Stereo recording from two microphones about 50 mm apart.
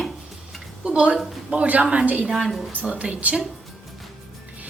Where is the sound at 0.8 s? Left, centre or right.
Right.